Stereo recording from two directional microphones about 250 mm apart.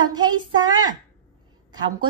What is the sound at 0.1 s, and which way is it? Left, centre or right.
Speech, centre.